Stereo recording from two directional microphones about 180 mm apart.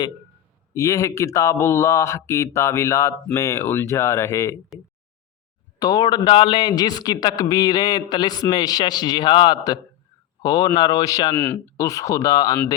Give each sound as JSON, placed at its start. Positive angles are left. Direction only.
{"t": 0.7, "sound": "speech", "side_deg": 15}
{"t": 5.8, "sound": "a man's voice", "side_deg": 20}
{"t": 11.3, "sound": "speech", "side_deg": 10}